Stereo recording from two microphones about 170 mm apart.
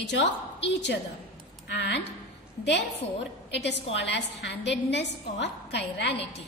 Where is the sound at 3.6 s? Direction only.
90° left.